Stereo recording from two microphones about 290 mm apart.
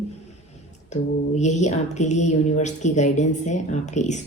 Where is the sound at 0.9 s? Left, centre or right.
Left.